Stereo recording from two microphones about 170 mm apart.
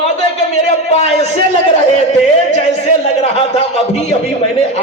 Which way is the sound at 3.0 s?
40° left (ahead or behind).